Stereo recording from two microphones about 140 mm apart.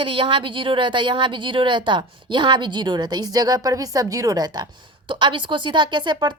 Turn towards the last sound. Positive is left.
turn(degrees=-35)  # may be behind; listen again after turning